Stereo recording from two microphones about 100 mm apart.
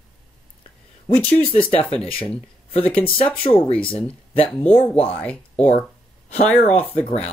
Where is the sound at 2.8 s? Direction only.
15° left (ahead or behind).